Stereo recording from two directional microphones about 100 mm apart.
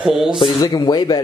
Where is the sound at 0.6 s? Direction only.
45° left (ahead or behind).